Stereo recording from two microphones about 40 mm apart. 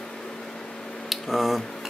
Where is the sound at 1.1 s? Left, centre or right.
Centre.